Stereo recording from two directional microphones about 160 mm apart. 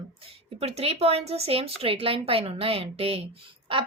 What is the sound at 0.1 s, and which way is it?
A woman's voice, 35° right (ahead or behind).